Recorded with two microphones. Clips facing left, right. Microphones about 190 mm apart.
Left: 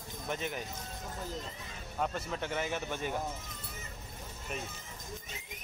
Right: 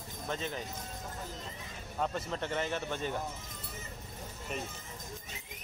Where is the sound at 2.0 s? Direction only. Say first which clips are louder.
Right 1 dB; 5° left (ahead or behind).